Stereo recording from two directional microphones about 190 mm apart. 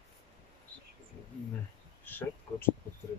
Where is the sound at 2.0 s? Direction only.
10° left (ahead or behind).